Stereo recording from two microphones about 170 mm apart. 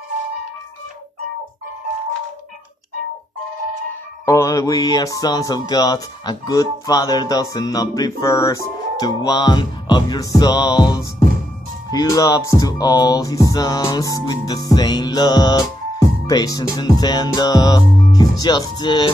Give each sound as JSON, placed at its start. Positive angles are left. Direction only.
{"t": 4.3, "sound": "speech", "side_deg": 20}